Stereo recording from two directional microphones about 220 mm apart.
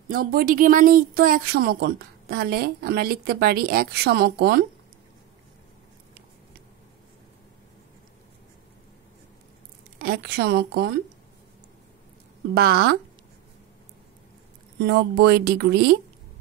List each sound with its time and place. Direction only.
0.1 s speech: 40° right (ahead or behind)
9.9 s a woman's voice: 45° right (ahead or behind)
12.5 s speech: 45° right (ahead or behind)
14.9 s speech: 50° right (ahead or behind)